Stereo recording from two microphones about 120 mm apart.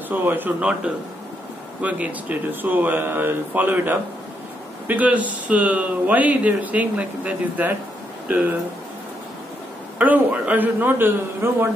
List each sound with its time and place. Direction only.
0.1 s speech: 15° right (ahead or behind)
9.9 s speech: 15° right (ahead or behind)